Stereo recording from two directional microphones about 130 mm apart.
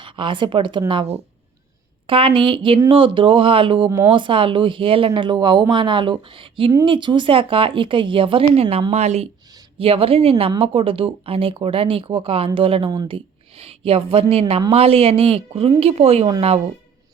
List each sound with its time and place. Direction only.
0.0 s speech: 40° right (ahead or behind)
2.0 s speech: 45° right (ahead or behind)
8.9 s speech: 60° right (ahead or behind)
9.7 s a woman's voice: 45° right (ahead or behind)